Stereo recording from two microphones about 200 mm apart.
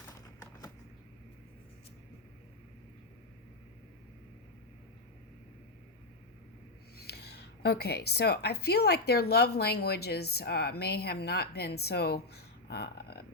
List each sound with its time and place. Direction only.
6.9 s speech: 55° left (ahead or behind)